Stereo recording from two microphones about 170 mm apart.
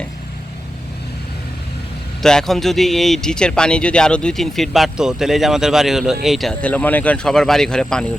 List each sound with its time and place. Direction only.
2.2 s speech: centre (ahead or behind)